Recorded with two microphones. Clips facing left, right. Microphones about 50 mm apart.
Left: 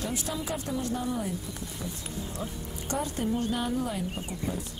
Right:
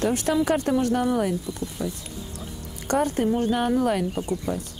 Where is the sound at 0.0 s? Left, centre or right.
Right.